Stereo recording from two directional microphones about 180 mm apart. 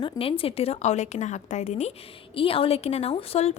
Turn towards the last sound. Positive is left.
turn(degrees=35)  # may be behind; listen again after turning